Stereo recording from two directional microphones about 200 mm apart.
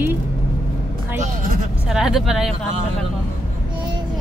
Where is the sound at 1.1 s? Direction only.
45° right (ahead or behind).